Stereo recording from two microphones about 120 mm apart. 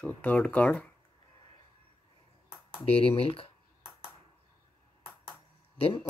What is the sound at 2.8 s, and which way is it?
Speech, 55° left (ahead or behind).